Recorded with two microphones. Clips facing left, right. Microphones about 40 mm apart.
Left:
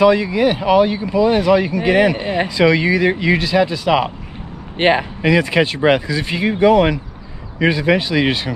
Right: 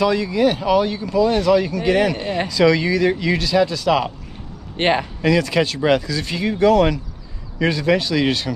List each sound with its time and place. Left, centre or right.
0.0 s speech: centre